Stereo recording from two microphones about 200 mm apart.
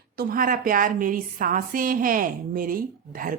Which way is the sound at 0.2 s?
45° right (ahead or behind).